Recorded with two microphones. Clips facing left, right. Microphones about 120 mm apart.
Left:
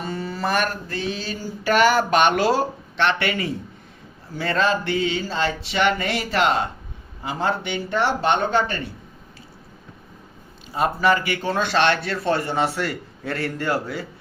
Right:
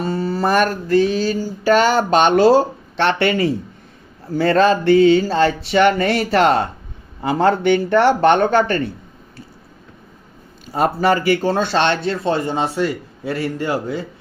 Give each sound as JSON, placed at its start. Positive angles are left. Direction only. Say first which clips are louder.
{"t": 0.0, "sound": "a sound", "louder": "right 7 dB", "side_deg": -35}
{"t": 7.2, "sound": "speech", "louder": "right 8 dB", "side_deg": -60}
{"t": 10.7, "sound": "speech", "louder": "right 3 dB", "side_deg": -40}